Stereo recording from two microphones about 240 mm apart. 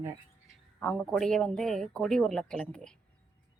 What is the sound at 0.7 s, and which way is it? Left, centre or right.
Speech, centre.